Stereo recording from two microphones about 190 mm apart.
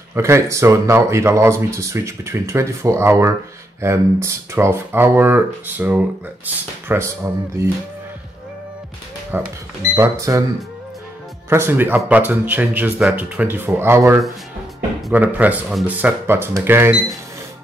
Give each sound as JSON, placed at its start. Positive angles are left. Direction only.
{"t": 0.1, "sound": "speech", "side_deg": -15}
{"t": 9.3, "sound": "speech", "side_deg": -10}
{"t": 11.4, "sound": "speech", "side_deg": -10}
{"t": 16.9, "sound": "speech", "side_deg": 0}